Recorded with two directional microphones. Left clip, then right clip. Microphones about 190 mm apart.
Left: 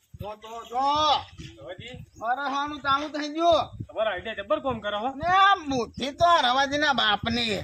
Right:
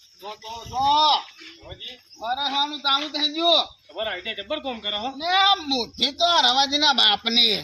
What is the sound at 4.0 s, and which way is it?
Speech, centre (ahead or behind).